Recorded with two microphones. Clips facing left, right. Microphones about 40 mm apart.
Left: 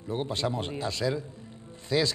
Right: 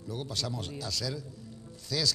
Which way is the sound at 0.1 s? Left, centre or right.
Left.